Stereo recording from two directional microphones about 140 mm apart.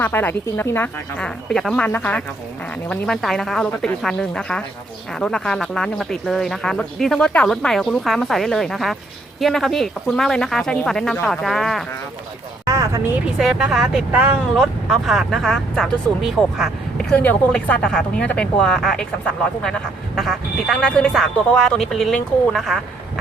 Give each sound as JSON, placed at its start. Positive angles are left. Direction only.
{"t": 0.0, "sound": "speech", "side_deg": 15}
{"t": 12.6, "sound": "a sound", "side_deg": -20}
{"t": 13.4, "sound": "speech", "side_deg": -5}